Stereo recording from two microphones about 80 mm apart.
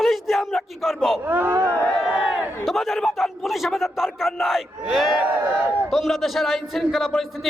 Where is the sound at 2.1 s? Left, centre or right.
Centre.